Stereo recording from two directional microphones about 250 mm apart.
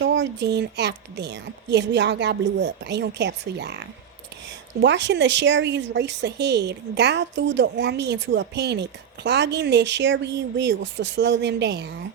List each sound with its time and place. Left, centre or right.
0.0 s speech: right